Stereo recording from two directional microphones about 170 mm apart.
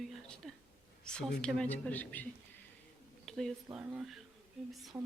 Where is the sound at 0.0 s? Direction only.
Centre (ahead or behind).